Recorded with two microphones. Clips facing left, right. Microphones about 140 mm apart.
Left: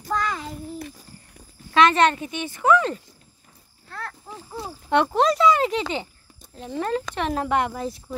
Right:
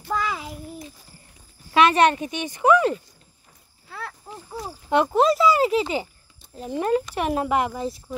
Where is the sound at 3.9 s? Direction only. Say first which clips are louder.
Even; 5° right (ahead or behind).